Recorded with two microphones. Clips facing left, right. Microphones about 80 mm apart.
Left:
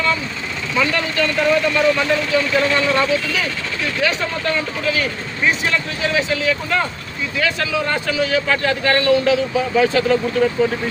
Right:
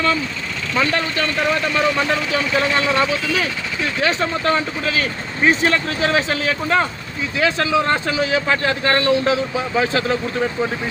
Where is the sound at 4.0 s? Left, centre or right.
Right.